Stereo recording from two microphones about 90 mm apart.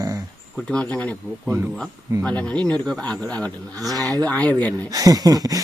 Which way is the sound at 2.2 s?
15° left (ahead or behind).